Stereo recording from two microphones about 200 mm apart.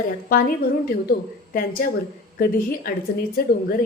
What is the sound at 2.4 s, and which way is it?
Speech, 45° left (ahead or behind).